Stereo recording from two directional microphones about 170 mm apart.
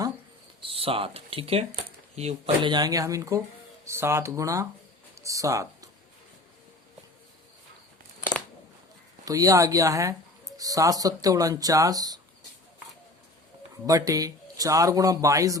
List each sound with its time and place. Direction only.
0.6 s a man's voice: 30° right (ahead or behind)
9.2 s a man's voice: 20° right (ahead or behind)
13.8 s a man's voice: 20° right (ahead or behind)